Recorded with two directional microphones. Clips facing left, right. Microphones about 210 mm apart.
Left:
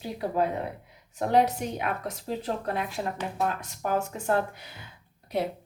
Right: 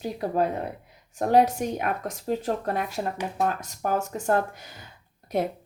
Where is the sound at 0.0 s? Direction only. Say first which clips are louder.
Right 2 dB; 45° right (ahead or behind).